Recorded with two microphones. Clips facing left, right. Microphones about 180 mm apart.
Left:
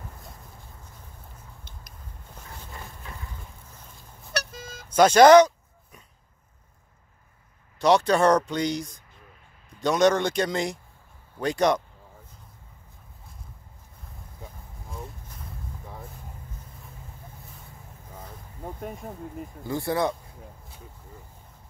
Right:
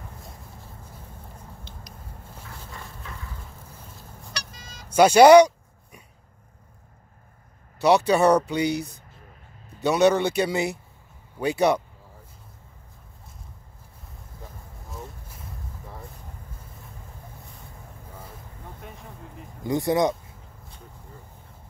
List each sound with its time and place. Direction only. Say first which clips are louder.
4.3 s vehicle: left 9 dB; 55° left (ahead or behind)
4.8 s a sound: right 1 dB; 10° right (ahead or behind)
7.8 s speech: right 1 dB; 10° right (ahead or behind)
14.4 s a sound: even; centre (ahead or behind)
18.8 s speech: left 8 dB; 45° left (ahead or behind)
19.6 s speech: right 4 dB; 15° right (ahead or behind)